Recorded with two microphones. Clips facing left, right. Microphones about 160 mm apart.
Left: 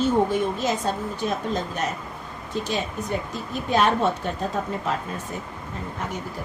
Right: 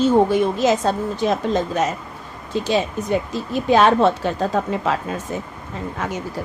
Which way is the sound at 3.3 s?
90° right.